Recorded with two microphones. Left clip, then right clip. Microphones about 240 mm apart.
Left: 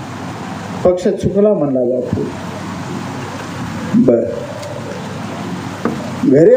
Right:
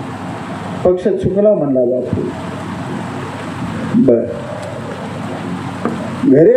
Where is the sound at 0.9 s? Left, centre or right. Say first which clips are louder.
Even; left.